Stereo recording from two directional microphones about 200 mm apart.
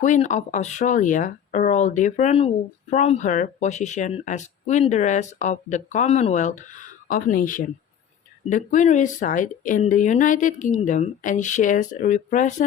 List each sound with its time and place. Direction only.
0.0 s speech: 40° left (ahead or behind)